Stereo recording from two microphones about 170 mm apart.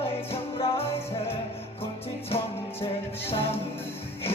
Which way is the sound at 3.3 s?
35° left (ahead or behind).